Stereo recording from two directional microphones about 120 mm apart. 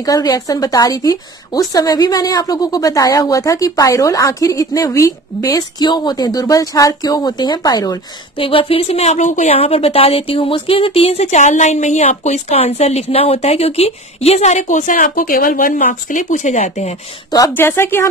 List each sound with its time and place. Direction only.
0.0 s speech: 30° left (ahead or behind)
8.4 s speech: 50° left (ahead or behind); by 9.5 s 80° left
9.5 s speech: 55° left (ahead or behind); by 16.9 s 70° left (ahead or behind)
17.6 s speech: 20° left (ahead or behind)